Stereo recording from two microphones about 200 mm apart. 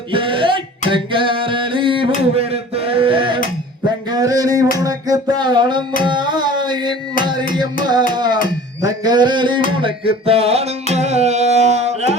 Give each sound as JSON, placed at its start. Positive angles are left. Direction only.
{"t": 0.1, "sound": "music", "side_deg": -25}
{"t": 3.8, "sound": "a sound", "side_deg": -20}
{"t": 4.8, "sound": "music", "side_deg": -20}
{"t": 6.0, "sound": "carnatic music", "side_deg": -20}
{"t": 7.5, "sound": "music", "side_deg": -20}
{"t": 8.8, "sound": "a sound", "side_deg": -20}
{"t": 9.6, "sound": "music", "side_deg": -25}